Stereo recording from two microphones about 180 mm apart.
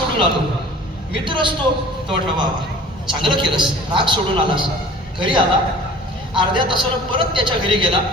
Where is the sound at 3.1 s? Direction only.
25° right (ahead or behind).